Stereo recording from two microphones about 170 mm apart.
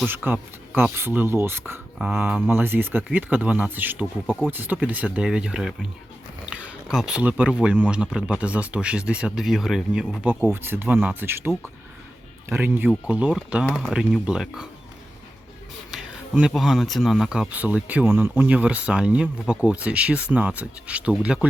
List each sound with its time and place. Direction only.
0.1 s speech: 10° right (ahead or behind)
15.9 s a sound: 5° right (ahead or behind)
16.5 s speech: centre (ahead or behind)